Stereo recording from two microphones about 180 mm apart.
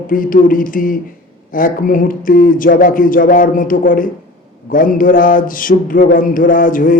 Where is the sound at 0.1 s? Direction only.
50° left (ahead or behind).